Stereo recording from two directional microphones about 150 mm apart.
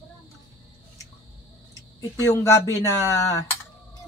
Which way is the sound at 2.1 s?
20° left (ahead or behind).